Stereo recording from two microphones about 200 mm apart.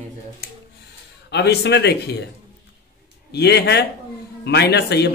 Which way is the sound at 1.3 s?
55° left (ahead or behind).